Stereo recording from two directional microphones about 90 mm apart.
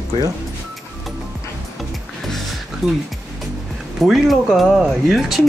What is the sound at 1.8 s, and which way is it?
Music, centre (ahead or behind).